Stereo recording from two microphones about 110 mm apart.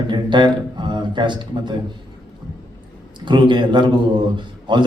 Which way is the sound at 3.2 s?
45° right (ahead or behind).